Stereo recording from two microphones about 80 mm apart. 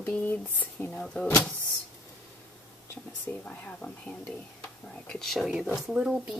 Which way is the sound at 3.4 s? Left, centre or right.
Centre.